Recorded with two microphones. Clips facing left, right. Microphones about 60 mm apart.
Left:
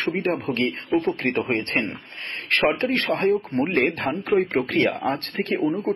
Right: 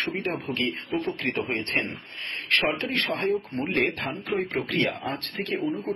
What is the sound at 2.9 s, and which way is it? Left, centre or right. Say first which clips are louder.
Speech: left 5 dB; left.